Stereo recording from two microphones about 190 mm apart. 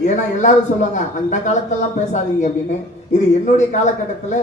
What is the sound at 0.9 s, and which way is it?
Speech, 40° left (ahead or behind).